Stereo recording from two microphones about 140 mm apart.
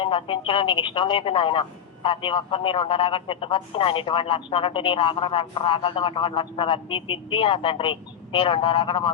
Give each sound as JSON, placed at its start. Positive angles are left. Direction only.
{"t": 0.0, "sound": "speech", "side_deg": 40}